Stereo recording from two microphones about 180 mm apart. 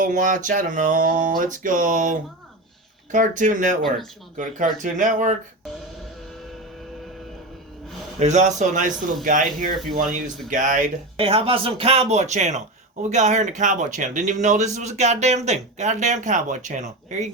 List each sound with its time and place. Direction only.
0.0 s speech: 45° right (ahead or behind)
3.8 s speech: centre (ahead or behind)
4.4 s speech: 45° right (ahead or behind)
8.2 s speech: 40° right (ahead or behind)